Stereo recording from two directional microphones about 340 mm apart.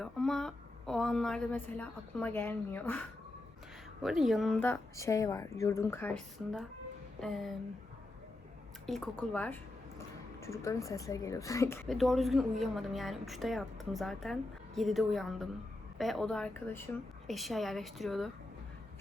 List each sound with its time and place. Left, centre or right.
0.0 s speech: centre
4.0 s a woman's voice: centre
8.9 s speech: centre